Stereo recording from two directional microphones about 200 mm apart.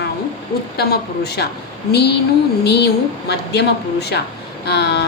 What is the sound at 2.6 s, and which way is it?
Speech, 55° left (ahead or behind).